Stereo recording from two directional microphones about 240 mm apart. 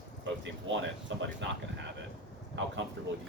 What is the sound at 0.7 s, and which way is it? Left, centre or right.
Speech, right.